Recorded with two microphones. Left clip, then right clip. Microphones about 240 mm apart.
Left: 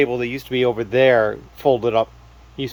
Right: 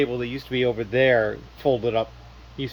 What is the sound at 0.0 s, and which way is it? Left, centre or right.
Speech, centre.